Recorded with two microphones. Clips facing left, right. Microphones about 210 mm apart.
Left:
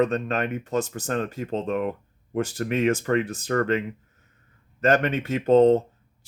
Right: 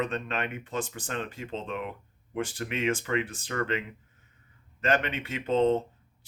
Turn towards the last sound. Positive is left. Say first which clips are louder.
# left 8 dB
turn(degrees=40)  # may be behind; listen again after turning